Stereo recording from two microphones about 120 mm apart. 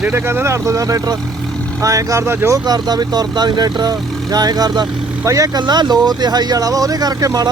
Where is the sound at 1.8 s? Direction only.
30° right (ahead or behind).